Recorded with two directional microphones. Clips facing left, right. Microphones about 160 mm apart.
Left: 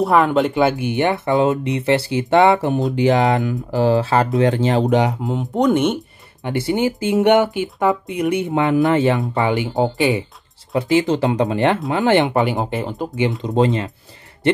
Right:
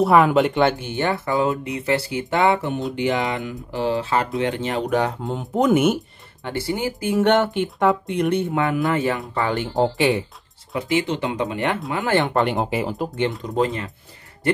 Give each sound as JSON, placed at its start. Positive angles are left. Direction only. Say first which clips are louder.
{"t": 0.0, "sound": "speech", "louder": "even", "side_deg": 0}
{"t": 5.2, "sound": "speech", "louder": "left 3 dB", "side_deg": 0}
{"t": 6.4, "sound": "speech", "louder": "left 6 dB", "side_deg": 20}
{"t": 7.3, "sound": "speech", "louder": "left 3 dB", "side_deg": 0}
{"t": 9.5, "sound": "speech", "louder": "left 2 dB", "side_deg": 5}
{"t": 10.7, "sound": "speech", "louder": "left 6 dB", "side_deg": 35}
{"t": 12.4, "sound": "speech", "louder": "left 2 dB", "side_deg": 0}
{"t": 13.4, "sound": "speech", "louder": "left 5 dB", "side_deg": 25}